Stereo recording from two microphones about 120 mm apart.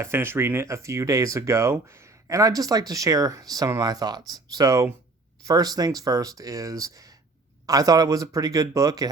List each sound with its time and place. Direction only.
0.0 s speech: 20° right (ahead or behind)